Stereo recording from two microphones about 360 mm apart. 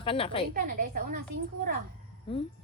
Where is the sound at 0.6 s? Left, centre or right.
Right.